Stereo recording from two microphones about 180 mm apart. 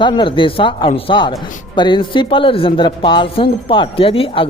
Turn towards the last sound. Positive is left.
turn(degrees=30)  # may be behind; listen again after turning